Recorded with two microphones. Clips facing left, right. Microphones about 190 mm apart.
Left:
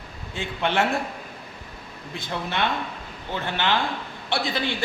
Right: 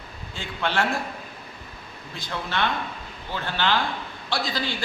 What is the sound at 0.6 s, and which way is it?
Speech, 20° left (ahead or behind).